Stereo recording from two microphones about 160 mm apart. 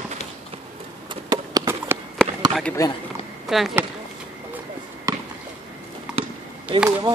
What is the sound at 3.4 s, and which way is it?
Chop, centre (ahead or behind).